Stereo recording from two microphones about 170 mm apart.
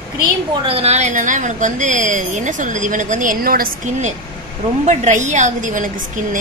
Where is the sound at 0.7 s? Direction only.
35° right (ahead or behind).